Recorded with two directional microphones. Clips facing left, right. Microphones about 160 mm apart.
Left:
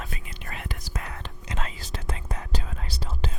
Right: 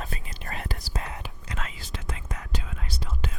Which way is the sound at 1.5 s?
30° left (ahead or behind).